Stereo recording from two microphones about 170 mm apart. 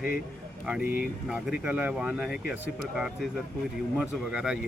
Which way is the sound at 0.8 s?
55° left (ahead or behind).